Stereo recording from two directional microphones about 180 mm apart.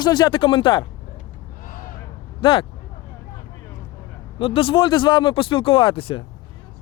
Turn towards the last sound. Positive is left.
turn(degrees=30)  # may be behind; listen again after turning